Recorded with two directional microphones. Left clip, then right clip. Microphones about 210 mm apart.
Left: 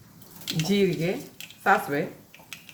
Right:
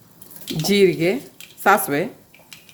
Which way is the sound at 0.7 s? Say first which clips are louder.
Right 9 dB; 55° right (ahead or behind).